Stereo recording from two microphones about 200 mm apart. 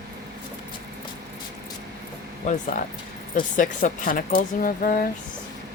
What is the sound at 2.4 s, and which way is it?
Speech, 35° left (ahead or behind).